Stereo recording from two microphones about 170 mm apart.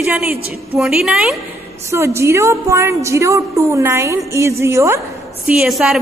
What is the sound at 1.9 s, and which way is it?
A woman's voice, 15° right (ahead or behind).